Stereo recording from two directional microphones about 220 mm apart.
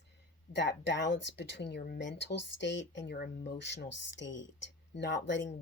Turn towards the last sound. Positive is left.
turn(degrees=55)  # may be behind; listen again after turning